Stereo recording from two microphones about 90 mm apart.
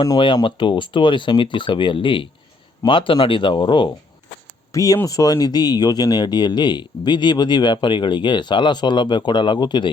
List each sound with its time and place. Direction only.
0.4 s speech: 65° left (ahead or behind)
4.7 s speech: 40° left (ahead or behind); by 9.9 s 55° left (ahead or behind)